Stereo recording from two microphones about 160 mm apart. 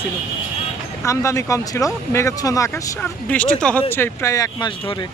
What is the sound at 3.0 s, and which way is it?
Speech, 10° left (ahead or behind).